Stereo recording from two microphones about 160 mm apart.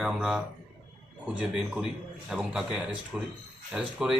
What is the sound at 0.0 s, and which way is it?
A man's voice, 5° right (ahead or behind).